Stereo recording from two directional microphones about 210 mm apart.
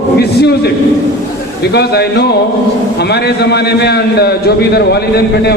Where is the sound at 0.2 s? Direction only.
50° left (ahead or behind).